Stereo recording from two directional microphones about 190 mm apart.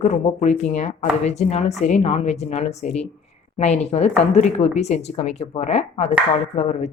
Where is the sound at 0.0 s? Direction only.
35° left (ahead or behind).